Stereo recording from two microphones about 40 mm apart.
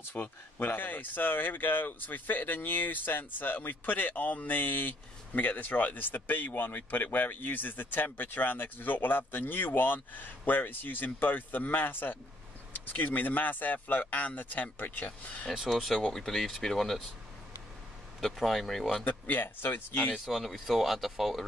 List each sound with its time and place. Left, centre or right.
0.1 s speech: left
6.5 s speech: left
15.9 s speech: centre
18.2 s speech: centre
19.0 s speech: left
20.2 s speech: centre